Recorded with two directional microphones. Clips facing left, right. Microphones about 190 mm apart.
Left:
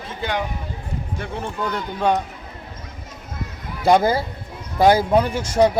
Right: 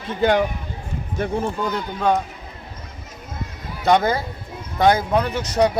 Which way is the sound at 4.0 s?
30° left (ahead or behind).